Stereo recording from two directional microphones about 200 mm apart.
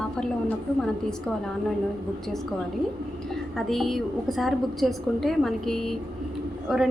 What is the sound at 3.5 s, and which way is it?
A woman's voice, centre (ahead or behind).